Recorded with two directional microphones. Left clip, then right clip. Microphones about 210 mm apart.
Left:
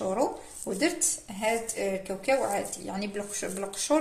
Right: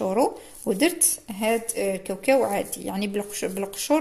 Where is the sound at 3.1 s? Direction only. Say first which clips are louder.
Right 6 dB; 45° right (ahead or behind).